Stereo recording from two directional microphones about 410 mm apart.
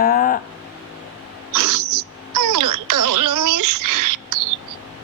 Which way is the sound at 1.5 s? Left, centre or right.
Right.